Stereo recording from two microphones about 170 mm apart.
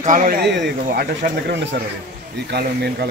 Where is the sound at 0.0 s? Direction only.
50° right (ahead or behind).